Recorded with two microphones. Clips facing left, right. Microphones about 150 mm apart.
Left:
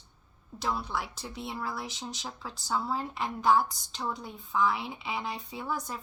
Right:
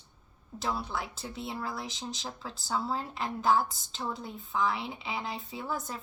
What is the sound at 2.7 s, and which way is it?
Speech, 30° right (ahead or behind).